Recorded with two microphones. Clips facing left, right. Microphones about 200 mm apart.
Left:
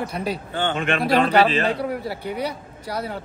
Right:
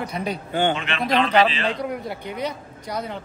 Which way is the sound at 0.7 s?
50° left (ahead or behind).